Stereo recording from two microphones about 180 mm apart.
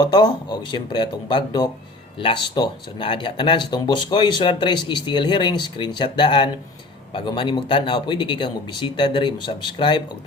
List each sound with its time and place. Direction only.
0.0 s speech: 25° left (ahead or behind)